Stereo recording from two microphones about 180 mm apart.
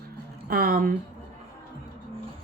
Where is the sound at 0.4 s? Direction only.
55° right (ahead or behind).